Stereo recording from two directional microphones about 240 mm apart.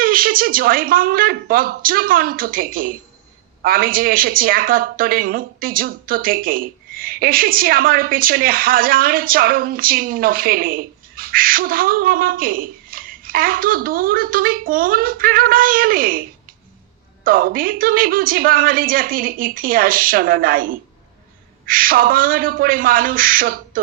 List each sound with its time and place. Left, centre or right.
0.0 s a woman's voice: right
17.2 s a woman's voice: right